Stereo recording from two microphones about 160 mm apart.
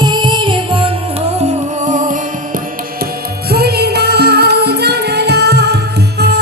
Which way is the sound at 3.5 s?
80° right.